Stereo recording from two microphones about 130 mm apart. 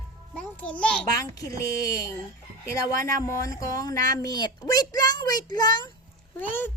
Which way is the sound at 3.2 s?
25° left (ahead or behind).